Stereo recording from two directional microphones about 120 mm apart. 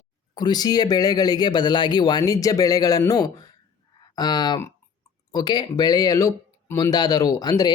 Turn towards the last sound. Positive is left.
turn(degrees=35)  # may be behind; listen again after turning